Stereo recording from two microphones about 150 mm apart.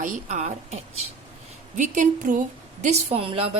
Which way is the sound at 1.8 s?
60° right (ahead or behind).